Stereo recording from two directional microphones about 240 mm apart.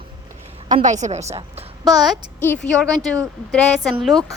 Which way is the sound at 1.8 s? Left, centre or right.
Centre.